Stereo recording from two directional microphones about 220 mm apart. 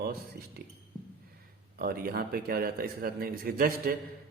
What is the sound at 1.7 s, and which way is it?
A man's voice, 40° right (ahead or behind).